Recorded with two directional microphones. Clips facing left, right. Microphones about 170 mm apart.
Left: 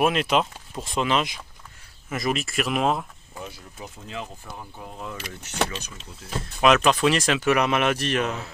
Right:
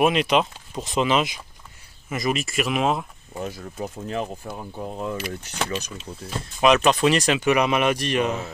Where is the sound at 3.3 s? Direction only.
45° right (ahead or behind).